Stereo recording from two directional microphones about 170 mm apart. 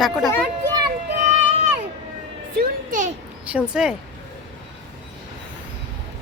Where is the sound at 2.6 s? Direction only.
50° right (ahead or behind).